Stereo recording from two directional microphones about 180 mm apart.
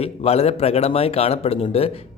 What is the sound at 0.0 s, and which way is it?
Speech, 35° left (ahead or behind).